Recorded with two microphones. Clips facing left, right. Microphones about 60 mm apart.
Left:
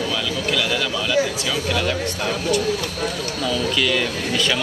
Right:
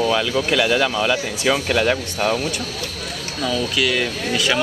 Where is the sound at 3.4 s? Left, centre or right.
Centre.